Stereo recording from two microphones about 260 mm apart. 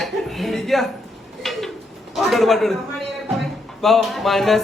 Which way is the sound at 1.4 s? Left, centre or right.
Centre.